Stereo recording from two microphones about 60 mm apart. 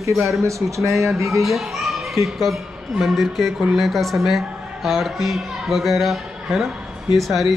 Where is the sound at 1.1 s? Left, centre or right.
Right.